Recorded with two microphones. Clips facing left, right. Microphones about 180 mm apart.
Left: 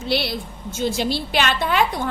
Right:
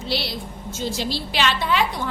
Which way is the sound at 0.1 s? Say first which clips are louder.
Left 4 dB; 55° left (ahead or behind).